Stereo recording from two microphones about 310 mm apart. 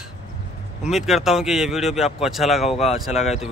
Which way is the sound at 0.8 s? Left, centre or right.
Centre.